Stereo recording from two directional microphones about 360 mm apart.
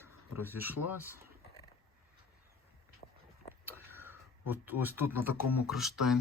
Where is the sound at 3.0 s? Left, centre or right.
Centre.